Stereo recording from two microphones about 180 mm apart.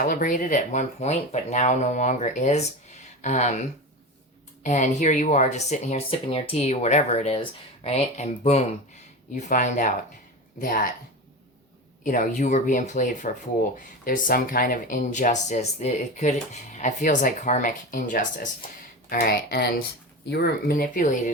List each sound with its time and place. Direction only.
0.0 s speech: 50° left (ahead or behind)
4.6 s speech: 40° left (ahead or behind)
12.0 s speech: 50° left (ahead or behind)